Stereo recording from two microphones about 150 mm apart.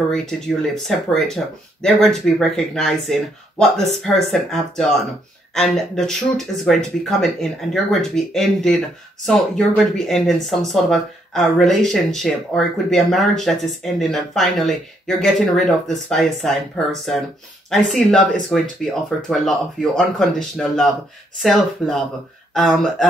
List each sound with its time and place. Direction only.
0.3 s speech: 5° left (ahead or behind)